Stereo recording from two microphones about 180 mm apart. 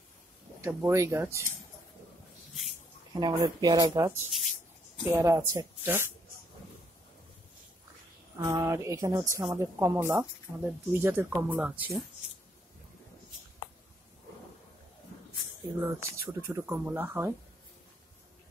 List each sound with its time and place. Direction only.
0.6 s speech: 15° right (ahead or behind)
3.2 s speech: 25° right (ahead or behind)
8.4 s speech: 15° right (ahead or behind)
15.8 s speech: 15° right (ahead or behind)